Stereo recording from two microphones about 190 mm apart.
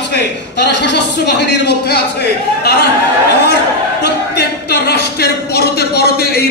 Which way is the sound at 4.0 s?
60° left (ahead or behind).